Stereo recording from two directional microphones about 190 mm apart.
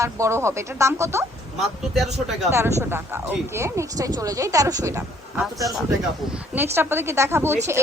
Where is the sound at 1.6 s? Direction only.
Centre (ahead or behind).